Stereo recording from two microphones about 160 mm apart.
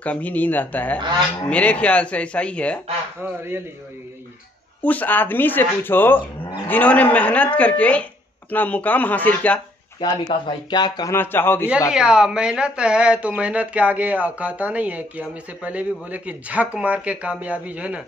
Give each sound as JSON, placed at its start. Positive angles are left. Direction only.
{"t": 0.0, "sound": "a woman's voice", "side_deg": 10}
{"t": 4.8, "sound": "a woman's voice", "side_deg": 10}
{"t": 9.9, "sound": "speech", "side_deg": 30}
{"t": 11.9, "sound": "speech", "side_deg": -5}